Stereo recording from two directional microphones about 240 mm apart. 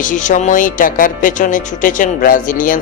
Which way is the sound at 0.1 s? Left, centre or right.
Left.